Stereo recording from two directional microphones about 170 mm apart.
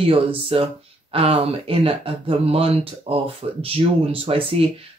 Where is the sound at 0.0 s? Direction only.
35° right (ahead or behind).